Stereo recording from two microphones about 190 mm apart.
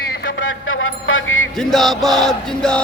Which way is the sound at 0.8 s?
90° left.